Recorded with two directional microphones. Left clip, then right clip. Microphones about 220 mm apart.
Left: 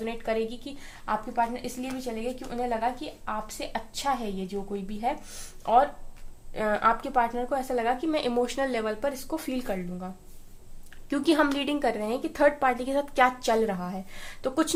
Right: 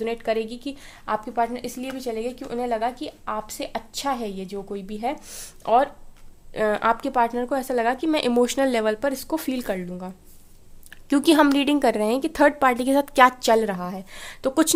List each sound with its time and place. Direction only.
0.0 s a woman's voice: 50° right (ahead or behind)
11.1 s a woman's voice: 50° right (ahead or behind)